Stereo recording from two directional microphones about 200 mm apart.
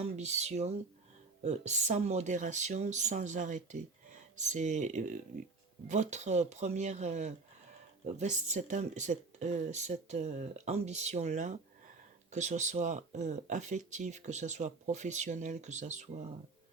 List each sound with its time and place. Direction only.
0.0 s speech: 35° right (ahead or behind)